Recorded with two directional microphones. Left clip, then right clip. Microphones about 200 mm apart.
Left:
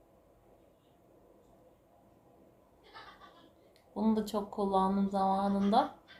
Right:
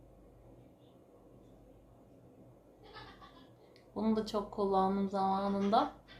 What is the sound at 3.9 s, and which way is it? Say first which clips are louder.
Speech: left 1 dB; 15° left (ahead or behind).